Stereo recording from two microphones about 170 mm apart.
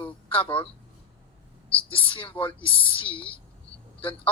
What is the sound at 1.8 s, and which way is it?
Speech, 30° left (ahead or behind).